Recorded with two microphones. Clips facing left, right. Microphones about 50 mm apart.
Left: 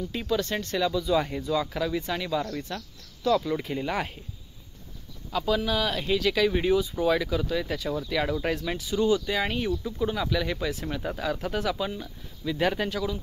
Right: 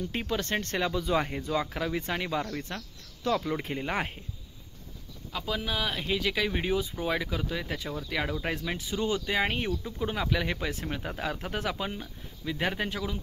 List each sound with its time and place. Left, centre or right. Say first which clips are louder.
0.1 s speech: left 4 dB; right
5.3 s speech: left 6 dB; centre
8.7 s speech: left 6 dB; right